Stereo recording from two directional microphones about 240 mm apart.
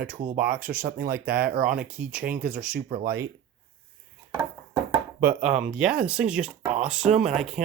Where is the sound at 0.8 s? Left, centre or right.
Right.